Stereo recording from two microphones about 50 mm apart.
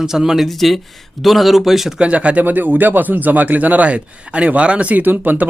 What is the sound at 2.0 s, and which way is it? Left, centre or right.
Speech, right.